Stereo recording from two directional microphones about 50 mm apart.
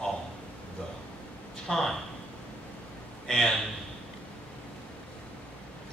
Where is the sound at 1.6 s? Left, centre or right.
Centre.